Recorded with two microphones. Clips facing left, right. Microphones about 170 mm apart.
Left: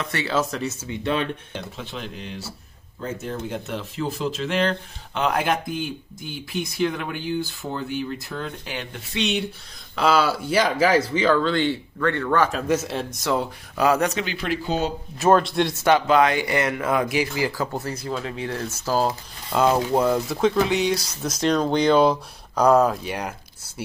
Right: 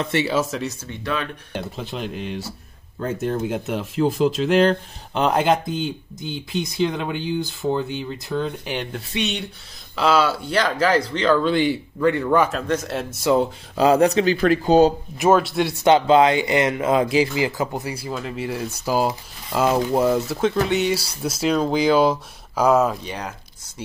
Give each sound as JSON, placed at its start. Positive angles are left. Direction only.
{"t": 0.0, "sound": "speech", "side_deg": -20}
{"t": 0.3, "sound": "speech", "side_deg": -5}
{"t": 1.0, "sound": "speech", "side_deg": 30}
{"t": 1.5, "sound": "speech", "side_deg": -40}
{"t": 2.0, "sound": "speech", "side_deg": -60}
{"t": 5.3, "sound": "speech", "side_deg": -25}
{"t": 9.9, "sound": "speech", "side_deg": 0}
{"t": 11.4, "sound": "speech", "side_deg": -15}
{"t": 12.4, "sound": "speech", "side_deg": 5}
{"t": 13.7, "sound": "speech", "side_deg": -30}
{"t": 14.3, "sound": "speech", "side_deg": -45}
{"t": 15.1, "sound": "speech", "side_deg": -5}
{"t": 15.7, "sound": "speech", "side_deg": -20}
{"t": 23.0, "sound": "biting", "side_deg": 10}